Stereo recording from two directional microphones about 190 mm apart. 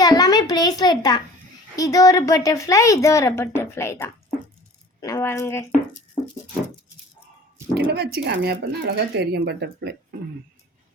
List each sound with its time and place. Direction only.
0.0 s a sound: 20° left (ahead or behind)
1.7 s a woman's voice: 20° left (ahead or behind)
7.9 s speech: 60° right (ahead or behind)